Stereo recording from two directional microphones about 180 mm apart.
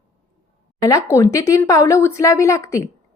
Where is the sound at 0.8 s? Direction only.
20° left (ahead or behind).